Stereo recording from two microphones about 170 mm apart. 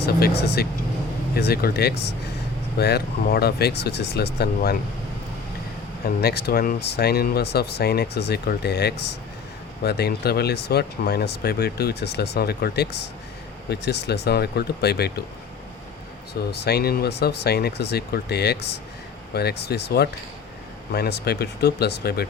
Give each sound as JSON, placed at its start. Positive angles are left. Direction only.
{"t": 0.4, "sound": "speech", "side_deg": 70}
{"t": 6.2, "sound": "speech", "side_deg": 70}
{"t": 16.5, "sound": "speech", "side_deg": 70}